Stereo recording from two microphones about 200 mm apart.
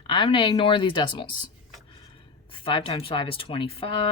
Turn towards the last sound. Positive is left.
turn(degrees=25)  # may be behind; listen again after turning